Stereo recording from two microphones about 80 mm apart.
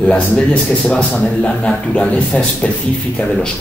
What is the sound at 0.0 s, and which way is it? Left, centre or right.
A man's voice, centre.